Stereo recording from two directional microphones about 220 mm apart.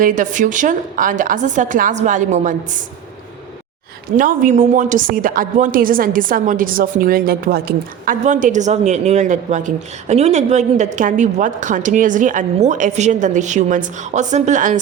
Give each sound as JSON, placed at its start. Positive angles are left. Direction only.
{"t": 0.0, "sound": "speech", "side_deg": -35}
{"t": 4.2, "sound": "speech", "side_deg": -35}